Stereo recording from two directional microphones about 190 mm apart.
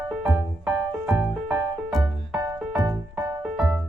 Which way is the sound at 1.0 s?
5° right (ahead or behind).